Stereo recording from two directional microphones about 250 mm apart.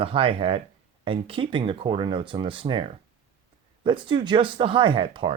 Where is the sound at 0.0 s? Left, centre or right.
Right.